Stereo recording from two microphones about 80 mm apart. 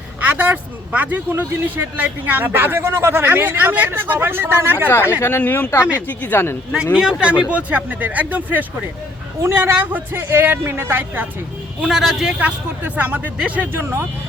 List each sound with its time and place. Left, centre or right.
0.2 s speech: right
4.9 s speech: left
6.9 s speech: centre
9.4 s speech: right
11.8 s speech: centre
12.4 s speech: centre